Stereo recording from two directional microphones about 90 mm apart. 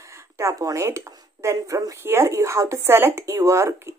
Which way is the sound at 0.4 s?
35° right (ahead or behind).